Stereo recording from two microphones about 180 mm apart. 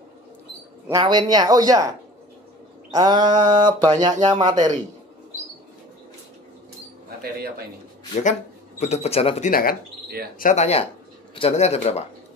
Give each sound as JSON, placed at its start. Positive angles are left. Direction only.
{"t": 0.8, "sound": "speech", "side_deg": -20}
{"t": 2.9, "sound": "speech", "side_deg": -25}
{"t": 7.2, "sound": "speech", "side_deg": -60}
{"t": 8.2, "sound": "speech", "side_deg": 40}
{"t": 9.5, "sound": "speech", "side_deg": 55}
{"t": 10.4, "sound": "speech", "side_deg": 40}